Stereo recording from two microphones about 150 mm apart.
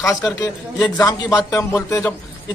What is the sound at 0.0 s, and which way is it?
A man's voice, 20° left (ahead or behind).